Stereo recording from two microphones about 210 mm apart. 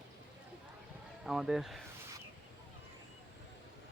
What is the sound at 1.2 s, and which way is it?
Speech, centre (ahead or behind).